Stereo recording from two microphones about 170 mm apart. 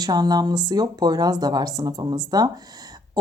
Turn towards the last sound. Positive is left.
turn(degrees=-25)  # may be behind; listen again after turning